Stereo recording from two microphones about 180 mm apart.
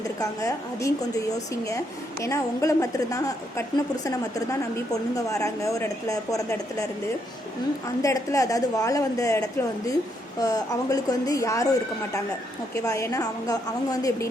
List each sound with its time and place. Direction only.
0.2 s a woman's voice: 20° left (ahead or behind)
8.0 s a woman's voice: 20° left (ahead or behind)
12.7 s a woman's voice: 15° left (ahead or behind)